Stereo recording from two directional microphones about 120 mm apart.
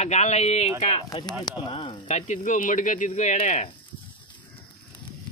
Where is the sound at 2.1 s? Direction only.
75° left (ahead or behind).